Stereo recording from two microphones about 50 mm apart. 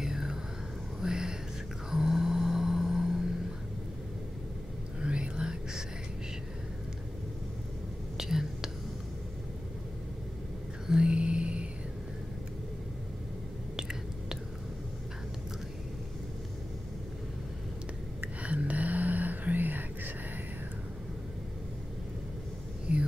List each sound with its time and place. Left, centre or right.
0.0 s a sound: centre
1.9 s vehicle: centre
5.0 s whispering: centre
8.2 s whispering: centre
10.9 s music: centre
13.7 s whispering: centre
18.4 s a sound: right
22.9 s whispering: right